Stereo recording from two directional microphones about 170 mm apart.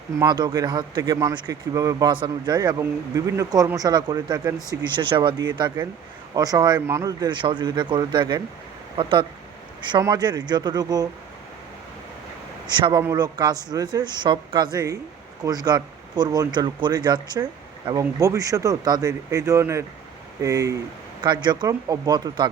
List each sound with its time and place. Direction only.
0.2 s speech: 25° right (ahead or behind)
12.6 s speech: 25° right (ahead or behind)